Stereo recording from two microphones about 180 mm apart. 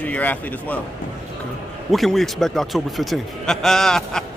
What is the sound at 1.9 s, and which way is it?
A man's voice, centre (ahead or behind).